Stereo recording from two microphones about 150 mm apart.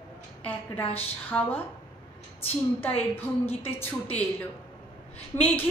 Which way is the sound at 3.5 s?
40° left (ahead or behind).